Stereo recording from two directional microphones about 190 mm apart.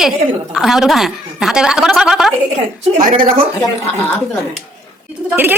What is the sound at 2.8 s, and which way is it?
Speech, 45° right (ahead or behind).